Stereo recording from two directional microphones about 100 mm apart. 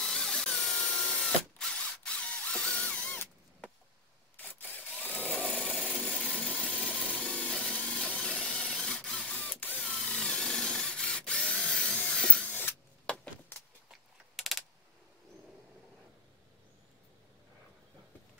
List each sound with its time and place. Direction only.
0.0 s drill: 5° left (ahead or behind)
4.4 s sewing machine: 15° left (ahead or behind)
5.8 s engine: 5° left (ahead or behind)
13.8 s a sound: centre (ahead or behind)